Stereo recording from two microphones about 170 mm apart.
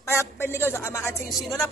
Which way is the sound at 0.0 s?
15° left (ahead or behind).